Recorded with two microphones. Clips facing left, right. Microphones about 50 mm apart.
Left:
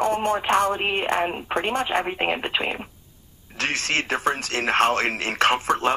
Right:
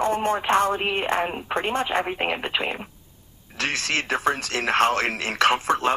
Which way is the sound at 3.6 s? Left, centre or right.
Left.